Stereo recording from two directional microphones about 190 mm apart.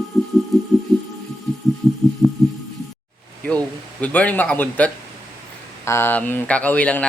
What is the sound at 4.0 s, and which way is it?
Speech, 5° left (ahead or behind).